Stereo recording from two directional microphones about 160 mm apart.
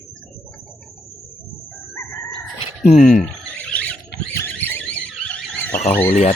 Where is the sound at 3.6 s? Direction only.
10° left (ahead or behind).